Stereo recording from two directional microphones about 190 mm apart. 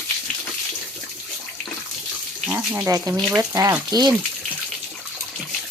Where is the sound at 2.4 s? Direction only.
10° right (ahead or behind).